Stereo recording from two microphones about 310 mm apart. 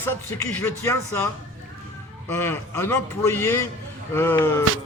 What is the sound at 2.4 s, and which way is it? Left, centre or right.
A man's voice, centre.